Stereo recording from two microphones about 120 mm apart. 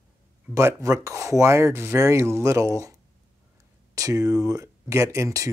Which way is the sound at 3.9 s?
30° right (ahead or behind).